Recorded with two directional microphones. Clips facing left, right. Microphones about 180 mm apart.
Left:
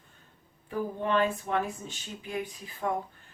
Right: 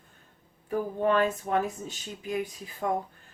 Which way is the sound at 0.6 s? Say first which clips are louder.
Right 4 dB; 45° right (ahead or behind).